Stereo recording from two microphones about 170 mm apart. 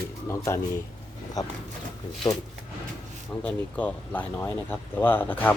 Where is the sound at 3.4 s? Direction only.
10° left (ahead or behind).